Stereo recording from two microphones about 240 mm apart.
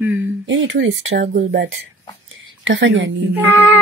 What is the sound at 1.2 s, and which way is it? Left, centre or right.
Speech, right.